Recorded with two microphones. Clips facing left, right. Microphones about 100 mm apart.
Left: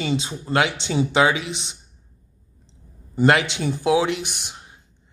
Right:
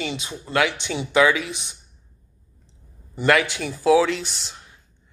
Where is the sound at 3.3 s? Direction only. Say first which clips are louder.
Right 1 dB; 25° left (ahead or behind).